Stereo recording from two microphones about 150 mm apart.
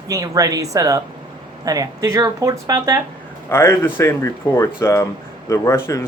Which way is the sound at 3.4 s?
15° left (ahead or behind).